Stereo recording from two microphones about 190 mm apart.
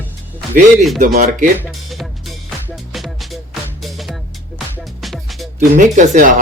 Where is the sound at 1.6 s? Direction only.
Centre (ahead or behind).